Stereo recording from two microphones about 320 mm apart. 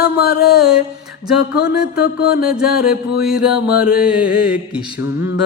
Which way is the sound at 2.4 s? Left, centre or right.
Centre.